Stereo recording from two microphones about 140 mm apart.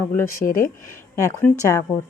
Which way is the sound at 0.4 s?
80° left.